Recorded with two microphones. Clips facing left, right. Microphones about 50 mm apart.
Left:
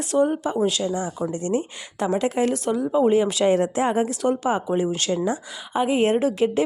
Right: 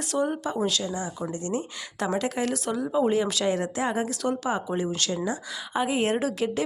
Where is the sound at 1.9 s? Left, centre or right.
Centre.